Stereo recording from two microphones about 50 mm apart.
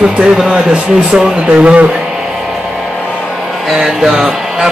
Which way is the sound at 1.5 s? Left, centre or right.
Right.